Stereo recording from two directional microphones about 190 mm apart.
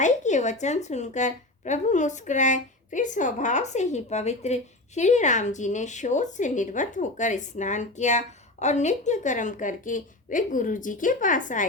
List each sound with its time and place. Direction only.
0.0 s a woman's voice: 40° left (ahead or behind)